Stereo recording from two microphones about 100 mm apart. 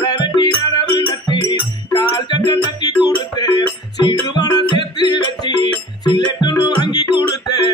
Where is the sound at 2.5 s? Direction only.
45° left (ahead or behind).